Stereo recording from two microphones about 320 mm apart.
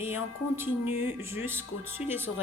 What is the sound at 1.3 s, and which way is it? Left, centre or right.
Speech, centre.